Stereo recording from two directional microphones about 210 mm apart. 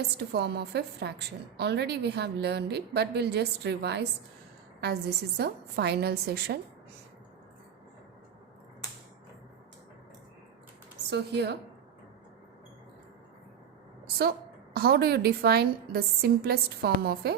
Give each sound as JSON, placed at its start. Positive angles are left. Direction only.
{"t": 0.3, "sound": "a woman's voice", "side_deg": -50}
{"t": 11.1, "sound": "a woman's voice", "side_deg": -50}
{"t": 14.2, "sound": "a woman's voice", "side_deg": -45}